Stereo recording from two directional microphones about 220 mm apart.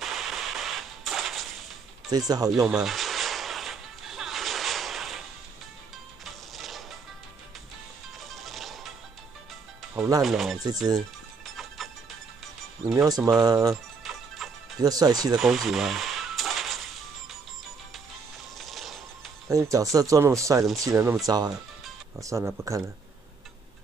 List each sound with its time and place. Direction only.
0.0 s a sound: centre (ahead or behind)
2.0 s speech: 20° right (ahead or behind)
2.7 s music: centre (ahead or behind)
6.5 s music: centre (ahead or behind)
8.3 s music: centre (ahead or behind)
9.9 s speech: 15° right (ahead or behind)
10.2 s speech: centre (ahead or behind)
12.8 s speech: 15° right (ahead or behind)
14.4 s music: centre (ahead or behind)
14.8 s speech: 15° right (ahead or behind)
15.3 s a sound: centre (ahead or behind)
18.6 s music: centre (ahead or behind)
19.4 s speech: 15° right (ahead or behind)